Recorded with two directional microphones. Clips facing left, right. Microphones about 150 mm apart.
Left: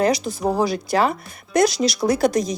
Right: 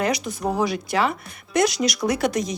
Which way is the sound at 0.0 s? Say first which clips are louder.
Left 4 dB; 30° left (ahead or behind).